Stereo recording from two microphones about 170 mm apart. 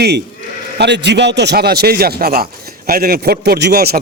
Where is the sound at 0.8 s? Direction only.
85° right; by 4.0 s 65° right (ahead or behind).